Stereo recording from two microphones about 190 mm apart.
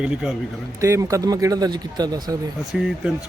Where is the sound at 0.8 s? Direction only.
15° right (ahead or behind).